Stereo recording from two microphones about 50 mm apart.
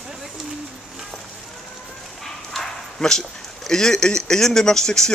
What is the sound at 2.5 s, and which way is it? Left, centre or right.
Bow-wow, centre.